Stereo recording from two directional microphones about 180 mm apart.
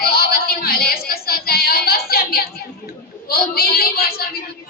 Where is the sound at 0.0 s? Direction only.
60° left (ahead or behind).